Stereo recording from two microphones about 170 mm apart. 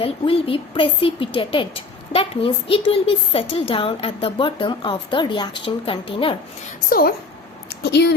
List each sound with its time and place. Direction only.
0.0 s a child's voice: 35° left (ahead or behind)
7.8 s speech: 80° left